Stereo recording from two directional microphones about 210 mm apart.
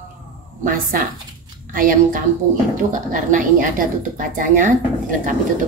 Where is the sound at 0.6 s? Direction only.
40° right (ahead or behind).